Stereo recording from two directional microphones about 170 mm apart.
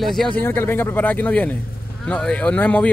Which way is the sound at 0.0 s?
Centre (ahead or behind).